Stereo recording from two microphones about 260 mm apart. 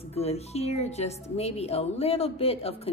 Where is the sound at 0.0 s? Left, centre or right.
Left.